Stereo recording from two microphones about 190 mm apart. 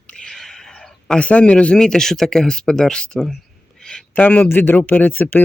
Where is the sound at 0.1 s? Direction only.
5° left (ahead or behind).